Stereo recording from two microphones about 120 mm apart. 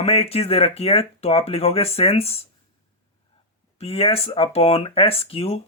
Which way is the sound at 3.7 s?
55° left (ahead or behind).